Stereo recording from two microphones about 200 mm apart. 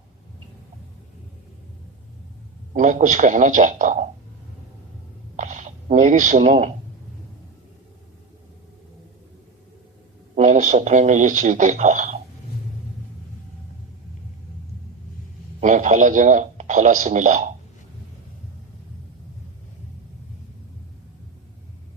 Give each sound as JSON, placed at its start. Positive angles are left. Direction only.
{"t": 2.7, "sound": "speech", "side_deg": -40}
{"t": 5.4, "sound": "speech", "side_deg": -35}
{"t": 10.3, "sound": "speech", "side_deg": -40}
{"t": 15.6, "sound": "speech", "side_deg": -35}